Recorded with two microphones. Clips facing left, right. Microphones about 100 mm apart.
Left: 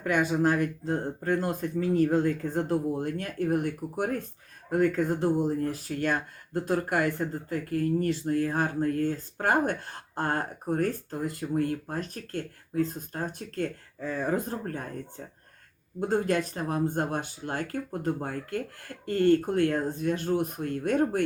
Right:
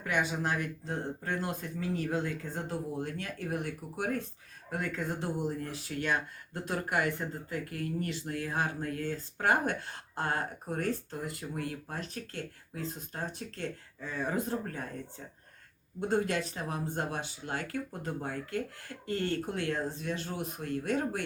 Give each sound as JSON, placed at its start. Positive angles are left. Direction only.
{"t": 0.0, "sound": "speech", "side_deg": 45}
{"t": 16.0, "sound": "speech", "side_deg": 45}